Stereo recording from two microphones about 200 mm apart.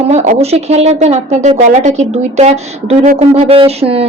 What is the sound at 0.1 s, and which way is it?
Speech, 35° right (ahead or behind).